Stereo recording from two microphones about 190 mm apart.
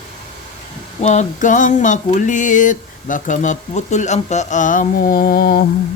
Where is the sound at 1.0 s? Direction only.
40° left (ahead or behind).